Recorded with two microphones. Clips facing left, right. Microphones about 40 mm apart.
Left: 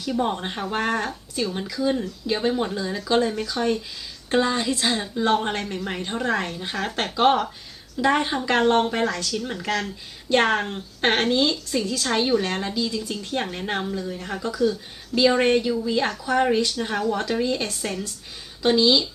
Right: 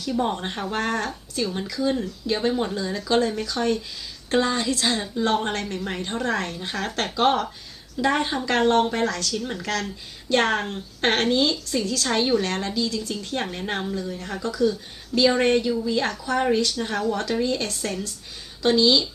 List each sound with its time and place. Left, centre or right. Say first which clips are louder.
0.2 s a woman's voice: even; centre
0.8 s a woman's voice: left 2 dB; centre
9.4 s a woman's voice: left 1 dB; centre
12.0 s a woman's voice: even; centre